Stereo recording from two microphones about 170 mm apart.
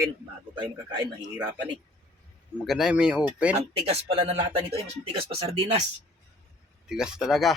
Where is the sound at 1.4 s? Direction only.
10° right (ahead or behind).